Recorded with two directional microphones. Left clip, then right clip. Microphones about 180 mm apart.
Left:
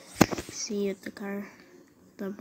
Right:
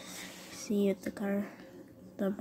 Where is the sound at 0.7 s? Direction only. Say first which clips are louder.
Right 2 dB; centre (ahead or behind).